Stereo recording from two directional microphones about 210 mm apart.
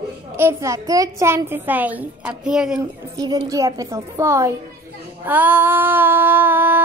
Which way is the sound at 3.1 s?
20° right (ahead or behind).